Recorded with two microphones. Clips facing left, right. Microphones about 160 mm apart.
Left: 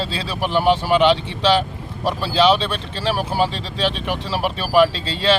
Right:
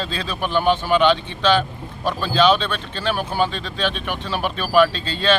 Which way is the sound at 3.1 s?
30° left (ahead or behind).